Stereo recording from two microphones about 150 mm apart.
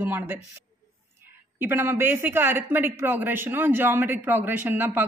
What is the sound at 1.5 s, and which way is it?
Speech, 15° right (ahead or behind).